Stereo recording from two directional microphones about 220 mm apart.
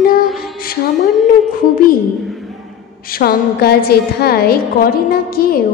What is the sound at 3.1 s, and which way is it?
A woman's voice, 45° left (ahead or behind).